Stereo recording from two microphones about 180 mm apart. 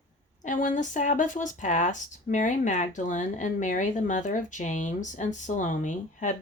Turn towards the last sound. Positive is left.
turn(degrees=45)  # may be behind; listen again after turning